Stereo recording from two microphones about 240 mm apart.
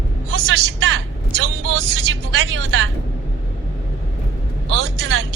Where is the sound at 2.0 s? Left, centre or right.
Right.